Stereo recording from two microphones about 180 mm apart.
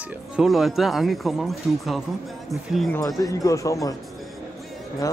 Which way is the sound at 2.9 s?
20° left (ahead or behind).